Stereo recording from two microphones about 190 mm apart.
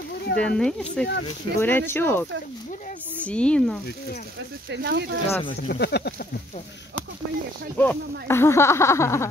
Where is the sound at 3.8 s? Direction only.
55° left (ahead or behind).